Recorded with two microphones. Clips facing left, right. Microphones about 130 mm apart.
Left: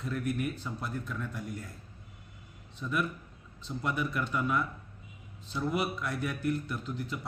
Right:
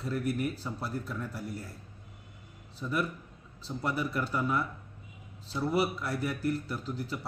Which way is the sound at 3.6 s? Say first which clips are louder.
Even; 35° right (ahead or behind).